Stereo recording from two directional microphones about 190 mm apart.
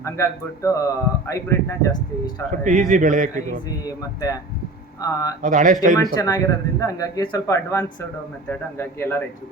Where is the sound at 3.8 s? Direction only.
20° left (ahead or behind).